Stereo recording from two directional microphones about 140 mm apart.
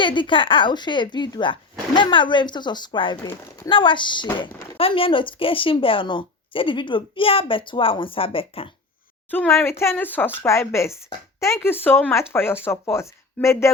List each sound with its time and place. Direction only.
0.0 s a woman's voice: 35° left (ahead or behind)
9.3 s a woman's voice: 15° left (ahead or behind)